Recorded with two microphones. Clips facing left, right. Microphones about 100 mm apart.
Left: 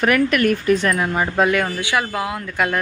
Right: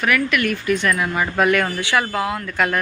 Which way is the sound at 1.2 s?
20° left (ahead or behind).